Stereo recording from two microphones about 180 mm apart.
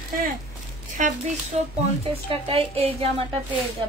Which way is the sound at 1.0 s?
45° right (ahead or behind).